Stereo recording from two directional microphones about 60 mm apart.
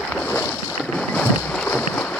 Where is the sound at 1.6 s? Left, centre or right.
Left.